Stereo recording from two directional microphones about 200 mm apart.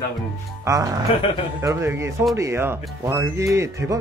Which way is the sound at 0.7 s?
15° right (ahead or behind).